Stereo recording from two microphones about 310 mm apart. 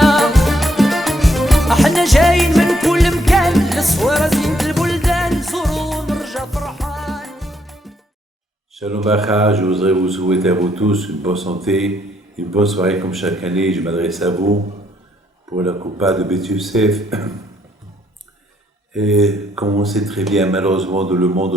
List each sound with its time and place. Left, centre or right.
0.0 s music: centre
8.7 s speech: centre
14.3 s speech: centre
15.4 s speech: centre
16.0 s speech: centre
18.9 s speech: centre
21.2 s speech: right